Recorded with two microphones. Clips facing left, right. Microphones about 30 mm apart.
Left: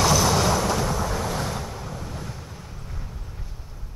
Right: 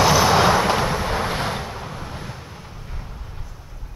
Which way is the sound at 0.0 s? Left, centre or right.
Right.